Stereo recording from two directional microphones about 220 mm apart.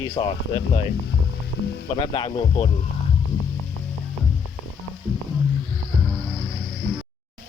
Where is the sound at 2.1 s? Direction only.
20° left (ahead or behind).